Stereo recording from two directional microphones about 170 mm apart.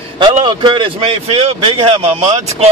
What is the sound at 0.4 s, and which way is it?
Speech, 30° right (ahead or behind).